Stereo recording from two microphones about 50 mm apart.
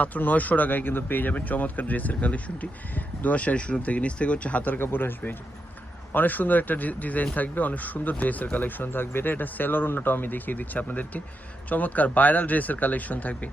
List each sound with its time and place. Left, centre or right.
0.0 s speech: left
4.8 s speech: left
6.1 s speech: left